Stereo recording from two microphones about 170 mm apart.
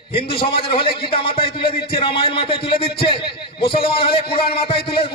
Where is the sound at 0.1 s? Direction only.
30° left (ahead or behind).